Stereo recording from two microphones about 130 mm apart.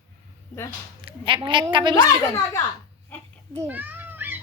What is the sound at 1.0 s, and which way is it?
Speech, 40° right (ahead or behind).